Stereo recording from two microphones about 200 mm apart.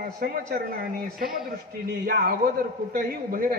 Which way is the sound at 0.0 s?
45° right (ahead or behind).